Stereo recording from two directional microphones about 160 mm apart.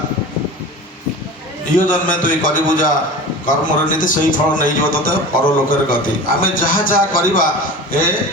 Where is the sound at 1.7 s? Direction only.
55° left (ahead or behind).